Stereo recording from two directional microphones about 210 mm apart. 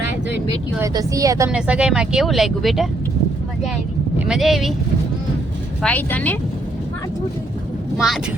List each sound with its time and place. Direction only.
0.8 s speech: 15° right (ahead or behind)
1.5 s speech: 5° right (ahead or behind)
4.3 s speech: centre (ahead or behind)
5.8 s speech: 10° left (ahead or behind)
7.9 s speech: centre (ahead or behind)